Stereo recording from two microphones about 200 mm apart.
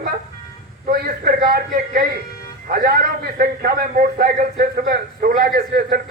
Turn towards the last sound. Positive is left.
turn(degrees=-50)  # may be behind; listen again after turning